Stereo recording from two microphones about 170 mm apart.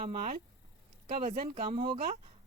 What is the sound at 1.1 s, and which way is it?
Speech, 50° right (ahead or behind).